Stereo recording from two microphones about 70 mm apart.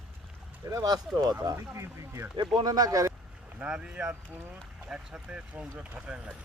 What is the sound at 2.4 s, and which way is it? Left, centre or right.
Speech, right.